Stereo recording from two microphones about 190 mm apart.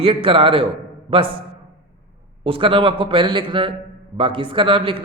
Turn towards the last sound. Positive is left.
turn(degrees=-30)  # may be behind; listen again after turning